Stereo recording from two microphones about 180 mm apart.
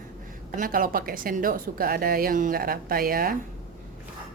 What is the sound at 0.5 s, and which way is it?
A woman's voice, 50° right (ahead or behind).